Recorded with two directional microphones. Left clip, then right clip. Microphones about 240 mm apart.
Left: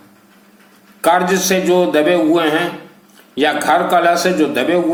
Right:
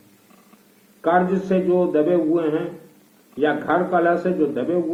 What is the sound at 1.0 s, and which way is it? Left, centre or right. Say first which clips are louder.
Speech: left 6 dB; left.